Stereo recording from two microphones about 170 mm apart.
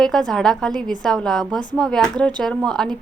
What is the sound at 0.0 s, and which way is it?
A woman's voice, 5° left (ahead or behind).